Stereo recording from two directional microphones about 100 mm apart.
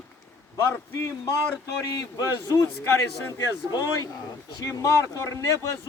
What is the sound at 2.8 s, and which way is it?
Speech, 25° left (ahead or behind).